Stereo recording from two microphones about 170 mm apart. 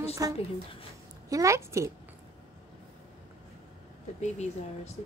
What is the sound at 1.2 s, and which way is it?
Speech, 20° right (ahead or behind).